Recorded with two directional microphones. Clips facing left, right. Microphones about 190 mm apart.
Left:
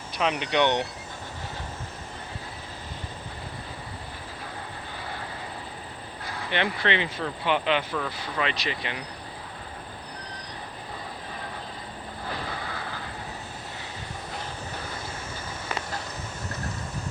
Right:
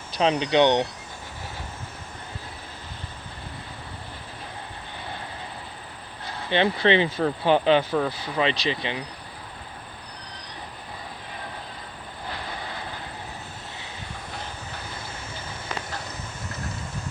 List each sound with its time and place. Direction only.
0.2 s speech: 30° right (ahead or behind)
6.2 s speech: 30° right (ahead or behind)